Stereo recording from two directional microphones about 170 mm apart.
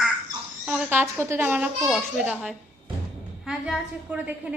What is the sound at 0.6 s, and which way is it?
A woman's voice, 10° right (ahead or behind).